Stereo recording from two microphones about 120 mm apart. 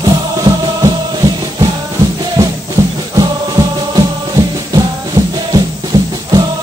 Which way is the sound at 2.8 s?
25° right (ahead or behind).